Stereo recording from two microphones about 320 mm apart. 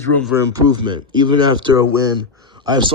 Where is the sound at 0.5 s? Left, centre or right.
Centre.